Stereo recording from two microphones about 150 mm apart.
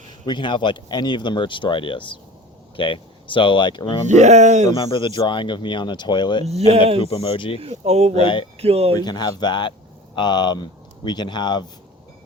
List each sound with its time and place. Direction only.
0.3 s speech: 30° left (ahead or behind)
4.1 s speech: 50° right (ahead or behind)
4.7 s speech: 35° left (ahead or behind)
6.4 s speech: 45° right (ahead or behind)
7.0 s speech: 40° left (ahead or behind)
7.6 s speech: 45° right (ahead or behind)
8.2 s speech: 35° left (ahead or behind)
8.5 s speech: 40° right (ahead or behind)
9.0 s speech: 25° left (ahead or behind)